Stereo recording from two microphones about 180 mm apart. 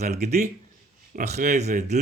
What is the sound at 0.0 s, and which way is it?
Speech, 40° right (ahead or behind).